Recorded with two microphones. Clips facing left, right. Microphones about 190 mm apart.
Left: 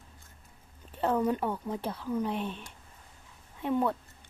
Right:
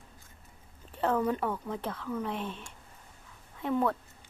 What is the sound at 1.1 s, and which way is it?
Speech, 15° left (ahead or behind).